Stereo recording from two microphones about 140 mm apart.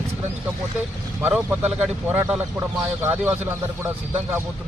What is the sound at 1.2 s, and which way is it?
Speech, 15° right (ahead or behind).